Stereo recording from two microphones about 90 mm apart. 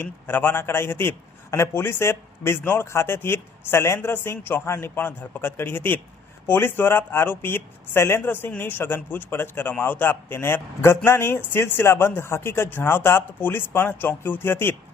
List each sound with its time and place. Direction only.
0.0 s a man's voice: 20° left (ahead or behind)